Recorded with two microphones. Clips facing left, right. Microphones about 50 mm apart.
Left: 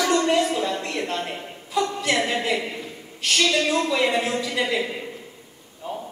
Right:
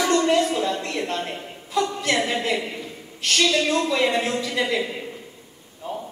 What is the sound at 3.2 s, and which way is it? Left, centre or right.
A woman's voice, centre.